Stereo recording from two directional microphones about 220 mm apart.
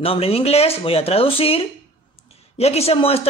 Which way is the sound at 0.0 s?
25° left (ahead or behind).